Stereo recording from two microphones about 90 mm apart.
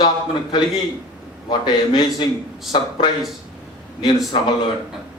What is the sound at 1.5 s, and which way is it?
Speech, 50° left (ahead or behind).